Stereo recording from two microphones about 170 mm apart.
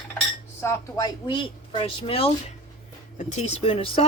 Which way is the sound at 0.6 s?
25° left (ahead or behind).